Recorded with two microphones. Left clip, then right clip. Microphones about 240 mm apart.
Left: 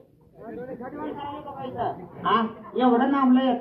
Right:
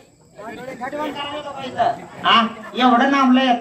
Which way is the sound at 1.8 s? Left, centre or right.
Right.